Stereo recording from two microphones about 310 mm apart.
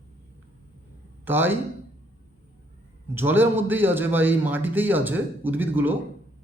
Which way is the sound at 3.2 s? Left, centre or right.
Centre.